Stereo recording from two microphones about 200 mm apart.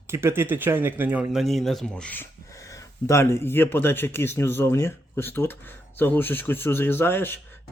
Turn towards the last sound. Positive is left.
turn(degrees=10)  # may be behind; listen again after turning